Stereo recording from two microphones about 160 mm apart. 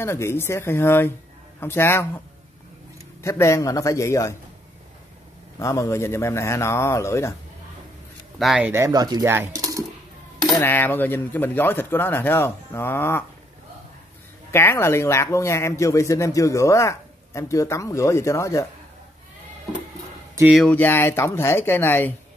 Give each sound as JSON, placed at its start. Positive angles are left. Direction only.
{"t": 0.0, "sound": "speech", "side_deg": 15}
{"t": 5.6, "sound": "speech", "side_deg": 20}
{"t": 8.4, "sound": "speech", "side_deg": 0}
{"t": 8.6, "sound": "speech", "side_deg": -15}
{"t": 10.5, "sound": "speech", "side_deg": 15}
{"t": 14.5, "sound": "speech", "side_deg": 15}
{"t": 20.5, "sound": "speech", "side_deg": 5}